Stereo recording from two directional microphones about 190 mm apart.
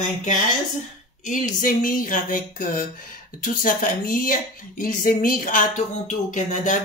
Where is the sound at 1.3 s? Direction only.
45° left (ahead or behind).